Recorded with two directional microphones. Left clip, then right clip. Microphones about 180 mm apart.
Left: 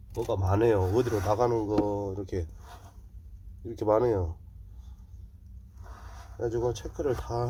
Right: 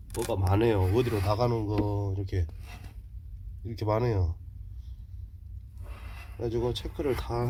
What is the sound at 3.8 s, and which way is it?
Speech, 25° left (ahead or behind).